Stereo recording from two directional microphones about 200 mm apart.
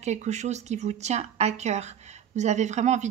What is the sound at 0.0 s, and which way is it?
Speech, 35° right (ahead or behind).